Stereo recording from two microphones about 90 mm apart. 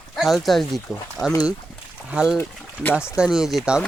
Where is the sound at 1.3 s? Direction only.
40° left (ahead or behind).